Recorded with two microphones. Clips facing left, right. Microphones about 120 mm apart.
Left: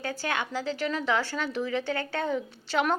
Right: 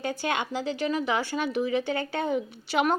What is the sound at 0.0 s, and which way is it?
A woman's voice, 20° right (ahead or behind).